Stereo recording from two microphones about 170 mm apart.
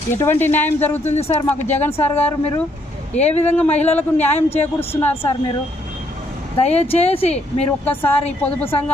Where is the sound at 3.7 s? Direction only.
40° left (ahead or behind).